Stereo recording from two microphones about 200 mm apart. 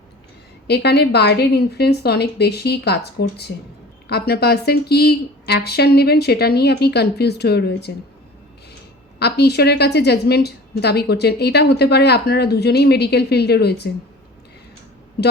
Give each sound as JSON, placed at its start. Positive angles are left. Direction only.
{"t": 0.7, "sound": "a woman's voice", "side_deg": 55}
{"t": 9.1, "sound": "a woman's voice", "side_deg": 55}